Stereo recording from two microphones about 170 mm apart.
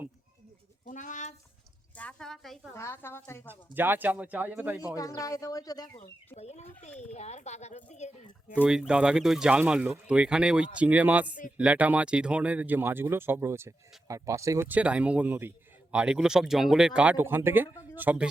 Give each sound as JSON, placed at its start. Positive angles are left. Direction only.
{"t": 0.9, "sound": "a sound", "side_deg": 45}
{"t": 2.0, "sound": "a woman's voice", "side_deg": 5}
{"t": 2.7, "sound": "a woman's voice", "side_deg": 15}
{"t": 3.4, "sound": "speech", "side_deg": -10}
{"t": 4.9, "sound": "speech", "side_deg": 20}
{"t": 6.0, "sound": "speech", "side_deg": 40}
{"t": 8.6, "sound": "speech", "side_deg": -5}